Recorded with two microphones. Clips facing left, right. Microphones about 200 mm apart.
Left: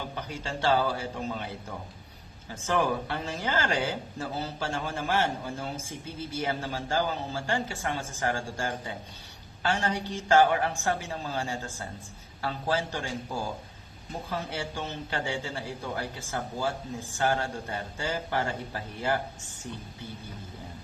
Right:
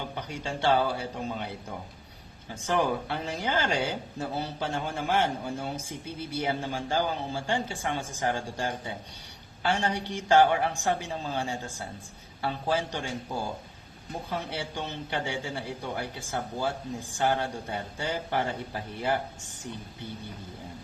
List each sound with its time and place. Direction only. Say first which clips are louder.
0.3 s speech: right 1 dB; 15° right (ahead or behind)
2.6 s speech: even; 15° right (ahead or behind)